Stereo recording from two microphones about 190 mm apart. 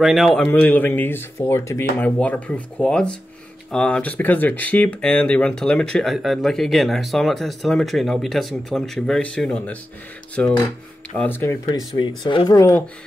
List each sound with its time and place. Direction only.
0.0 s speech: centre (ahead or behind)
11.2 s speech: 10° left (ahead or behind)
12.0 s speech: 25° left (ahead or behind)